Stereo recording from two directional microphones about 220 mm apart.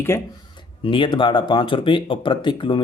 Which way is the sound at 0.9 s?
25° left (ahead or behind).